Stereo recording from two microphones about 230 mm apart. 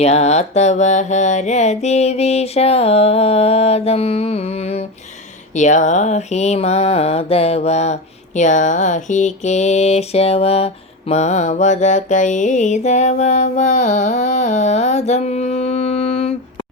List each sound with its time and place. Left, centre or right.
0.0 s mantra: left